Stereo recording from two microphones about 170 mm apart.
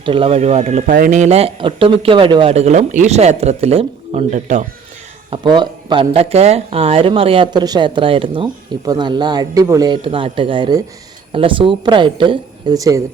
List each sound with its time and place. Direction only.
0.0 s speech: 30° right (ahead or behind)
5.3 s speech: 25° right (ahead or behind)